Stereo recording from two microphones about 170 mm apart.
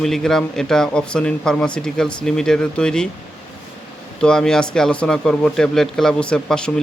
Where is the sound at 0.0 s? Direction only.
Centre (ahead or behind).